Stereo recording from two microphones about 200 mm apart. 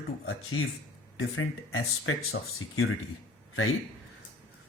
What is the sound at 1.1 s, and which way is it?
Speech, 90° left.